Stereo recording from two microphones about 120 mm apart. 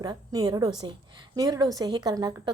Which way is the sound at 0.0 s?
35° right (ahead or behind).